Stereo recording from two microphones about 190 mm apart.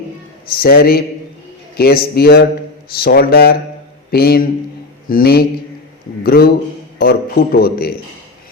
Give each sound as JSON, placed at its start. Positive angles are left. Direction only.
{"t": 0.4, "sound": "a man's voice", "side_deg": 50}